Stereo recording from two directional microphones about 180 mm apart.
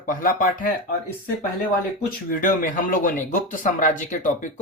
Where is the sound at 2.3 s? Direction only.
50° left (ahead or behind).